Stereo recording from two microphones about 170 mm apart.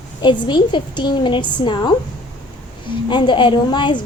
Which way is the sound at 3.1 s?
30° left (ahead or behind).